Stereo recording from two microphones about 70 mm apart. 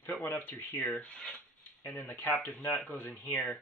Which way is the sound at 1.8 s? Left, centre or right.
Left.